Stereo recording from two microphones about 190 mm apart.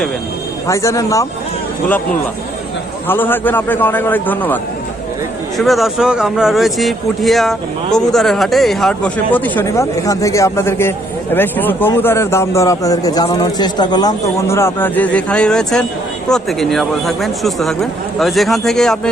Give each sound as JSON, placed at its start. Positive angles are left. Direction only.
{"t": 0.7, "sound": "speech", "side_deg": 15}
{"t": 3.1, "sound": "speech", "side_deg": 10}